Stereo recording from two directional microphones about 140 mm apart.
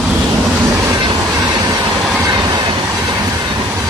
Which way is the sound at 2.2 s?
30° right (ahead or behind).